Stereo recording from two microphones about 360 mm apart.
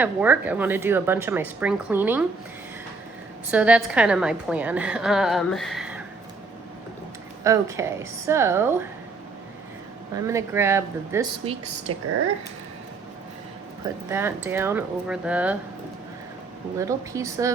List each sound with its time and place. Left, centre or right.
0.0 s a woman's voice: centre
3.5 s a woman's voice: centre
7.4 s a woman's voice: centre
10.2 s a woman's voice: centre
11.9 s speech: right
14.1 s a woman's voice: centre
16.7 s a woman's voice: centre